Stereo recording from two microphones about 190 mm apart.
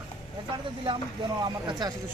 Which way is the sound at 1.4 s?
20° right (ahead or behind).